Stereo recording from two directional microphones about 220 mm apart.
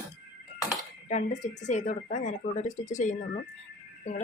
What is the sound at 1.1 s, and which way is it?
Speech, 35° left (ahead or behind).